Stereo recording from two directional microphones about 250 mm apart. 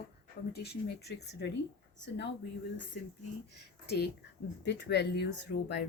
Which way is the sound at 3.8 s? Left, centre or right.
Left.